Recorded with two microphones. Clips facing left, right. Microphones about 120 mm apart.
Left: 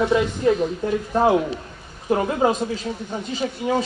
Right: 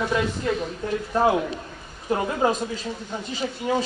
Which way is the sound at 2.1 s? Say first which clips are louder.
Left 3 dB; 15° left (ahead or behind).